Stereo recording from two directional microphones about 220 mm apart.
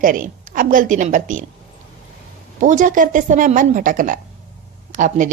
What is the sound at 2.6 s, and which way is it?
A woman's voice, 35° right (ahead or behind).